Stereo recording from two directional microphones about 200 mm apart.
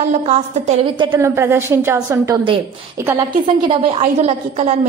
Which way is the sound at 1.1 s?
10° right (ahead or behind).